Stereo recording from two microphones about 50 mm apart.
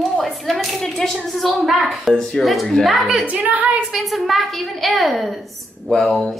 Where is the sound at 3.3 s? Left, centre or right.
Right.